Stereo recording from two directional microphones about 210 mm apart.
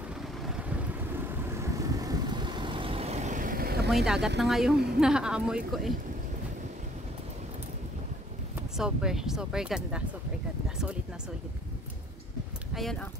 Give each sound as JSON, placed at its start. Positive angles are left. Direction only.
{"t": 0.5, "sound": "vehicle", "side_deg": -5}
{"t": 3.9, "sound": "speech", "side_deg": 0}
{"t": 8.5, "sound": "speech", "side_deg": -5}